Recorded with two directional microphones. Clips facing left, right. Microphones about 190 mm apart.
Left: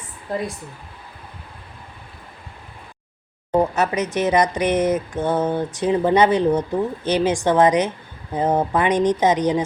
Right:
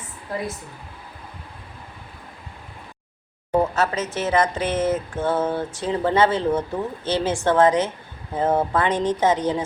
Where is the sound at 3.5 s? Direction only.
15° left (ahead or behind).